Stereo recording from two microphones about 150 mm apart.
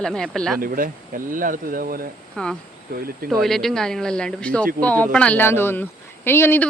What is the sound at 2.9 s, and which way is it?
Speech, 80° right.